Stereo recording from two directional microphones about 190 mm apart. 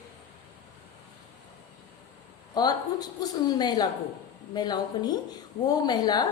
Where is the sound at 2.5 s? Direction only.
20° left (ahead or behind).